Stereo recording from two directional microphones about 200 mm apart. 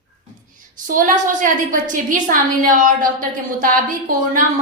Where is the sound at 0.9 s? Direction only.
40° right (ahead or behind).